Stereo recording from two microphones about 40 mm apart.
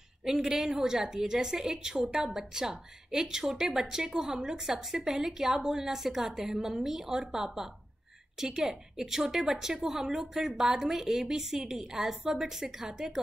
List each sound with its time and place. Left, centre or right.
0.2 s a woman's voice: centre